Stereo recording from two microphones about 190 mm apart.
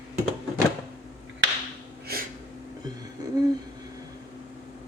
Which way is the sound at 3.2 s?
20° right (ahead or behind).